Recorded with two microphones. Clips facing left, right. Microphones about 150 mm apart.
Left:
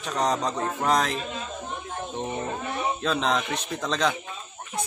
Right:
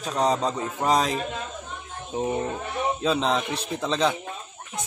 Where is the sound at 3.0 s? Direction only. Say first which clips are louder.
Right 2 dB; 5° right (ahead or behind).